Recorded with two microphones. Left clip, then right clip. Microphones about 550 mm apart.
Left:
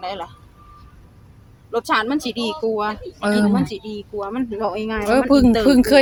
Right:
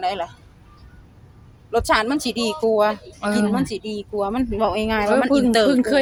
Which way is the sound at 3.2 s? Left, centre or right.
Left.